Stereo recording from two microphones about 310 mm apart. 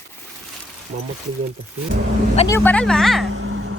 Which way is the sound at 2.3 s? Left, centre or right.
Centre.